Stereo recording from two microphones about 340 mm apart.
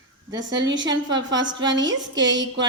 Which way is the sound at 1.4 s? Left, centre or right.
Centre.